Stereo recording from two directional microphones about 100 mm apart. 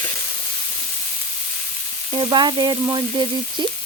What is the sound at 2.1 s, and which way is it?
Frying, 50° right (ahead or behind).